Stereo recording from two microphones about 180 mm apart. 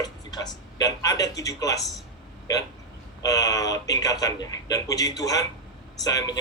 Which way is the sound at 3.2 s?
20° left (ahead or behind).